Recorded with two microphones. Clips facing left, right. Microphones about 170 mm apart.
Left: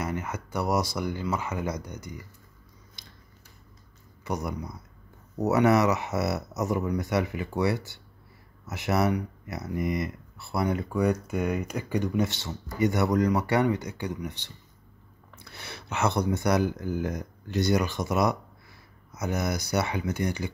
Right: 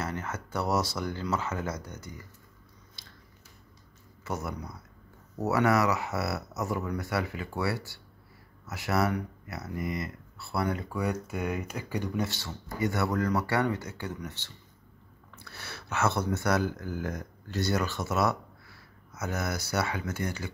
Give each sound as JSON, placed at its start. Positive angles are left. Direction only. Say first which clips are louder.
{"t": 0.0, "sound": "speech", "louder": "left 3 dB", "side_deg": 15}
{"t": 3.0, "sound": "biting", "louder": "left 2 dB", "side_deg": 15}
{"t": 4.2, "sound": "speech", "louder": "left 3 dB", "side_deg": 15}
{"t": 11.1, "sound": "speech", "louder": "left 3 dB", "side_deg": 45}
{"t": 12.2, "sound": "speech", "louder": "left 4 dB", "side_deg": 20}